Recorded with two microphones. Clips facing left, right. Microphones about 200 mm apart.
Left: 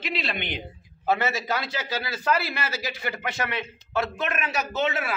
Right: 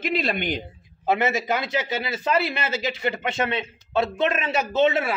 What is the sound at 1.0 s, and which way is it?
A man's voice, 20° right (ahead or behind).